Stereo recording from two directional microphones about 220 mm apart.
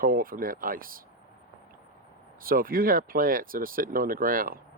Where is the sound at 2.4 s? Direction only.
40° right (ahead or behind).